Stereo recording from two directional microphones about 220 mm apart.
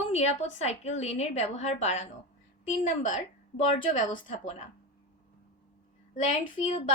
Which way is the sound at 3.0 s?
35° left (ahead or behind).